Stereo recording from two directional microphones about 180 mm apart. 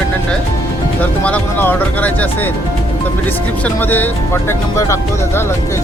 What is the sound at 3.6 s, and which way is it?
Speech, 10° left (ahead or behind).